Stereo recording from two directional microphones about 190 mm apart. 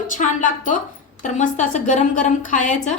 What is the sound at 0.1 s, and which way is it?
A woman's voice, 45° left (ahead or behind).